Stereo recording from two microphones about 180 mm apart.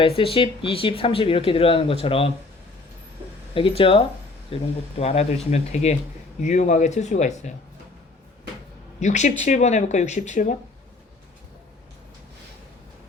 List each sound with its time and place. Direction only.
0.0 s speech: 30° left (ahead or behind)
3.5 s speech: 30° left (ahead or behind)
9.0 s speech: 40° left (ahead or behind)